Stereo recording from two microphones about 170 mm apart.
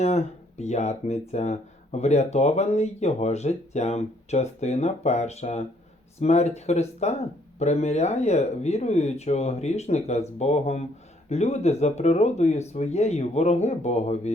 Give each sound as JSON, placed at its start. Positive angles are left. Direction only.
{"t": 0.0, "sound": "speech", "side_deg": 40}